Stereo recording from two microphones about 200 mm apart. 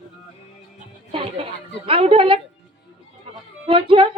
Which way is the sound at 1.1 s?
30° right (ahead or behind).